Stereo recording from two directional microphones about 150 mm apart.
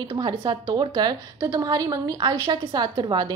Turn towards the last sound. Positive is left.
turn(degrees=-30)  # may be behind; listen again after turning